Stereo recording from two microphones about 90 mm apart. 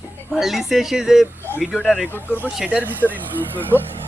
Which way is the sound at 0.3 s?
Centre (ahead or behind).